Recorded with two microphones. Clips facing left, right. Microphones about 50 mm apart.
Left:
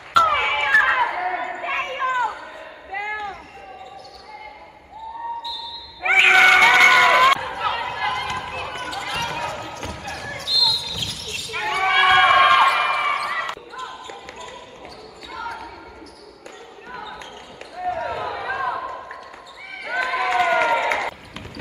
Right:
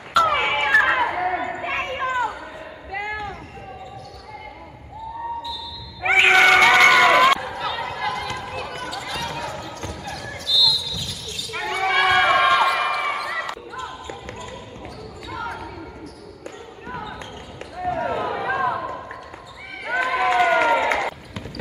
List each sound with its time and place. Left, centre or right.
0.1 s a sound: centre
6.0 s crowd: centre
7.3 s a sound: left
8.0 s basketball bounce: left
8.5 s run: left
9.1 s basketball bounce: left
11.5 s basketball bounce: left
13.7 s basketball bounce: centre
18.1 s a sound: centre
19.8 s run: centre